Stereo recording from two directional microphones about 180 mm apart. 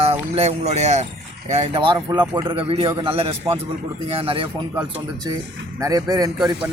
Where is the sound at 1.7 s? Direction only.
25° right (ahead or behind).